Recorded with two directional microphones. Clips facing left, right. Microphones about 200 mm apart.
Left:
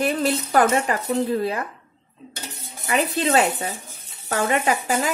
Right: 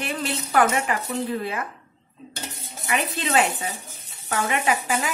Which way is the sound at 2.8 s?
40° left (ahead or behind).